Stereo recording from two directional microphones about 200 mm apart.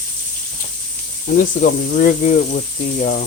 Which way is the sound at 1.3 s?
45° left (ahead or behind).